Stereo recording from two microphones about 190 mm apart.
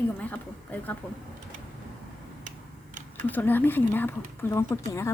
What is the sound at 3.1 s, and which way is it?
Speech, 10° left (ahead or behind).